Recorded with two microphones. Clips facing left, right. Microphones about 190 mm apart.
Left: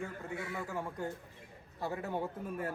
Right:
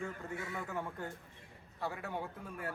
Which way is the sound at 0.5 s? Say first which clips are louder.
Left 2 dB; 10° left (ahead or behind).